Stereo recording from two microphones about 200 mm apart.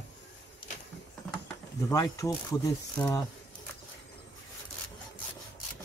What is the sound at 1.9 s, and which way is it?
Speech, 15° left (ahead or behind).